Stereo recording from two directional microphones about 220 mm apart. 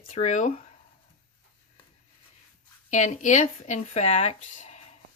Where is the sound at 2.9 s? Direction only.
35° left (ahead or behind).